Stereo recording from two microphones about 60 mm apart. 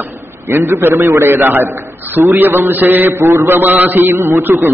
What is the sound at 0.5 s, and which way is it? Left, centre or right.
A man's voice, right.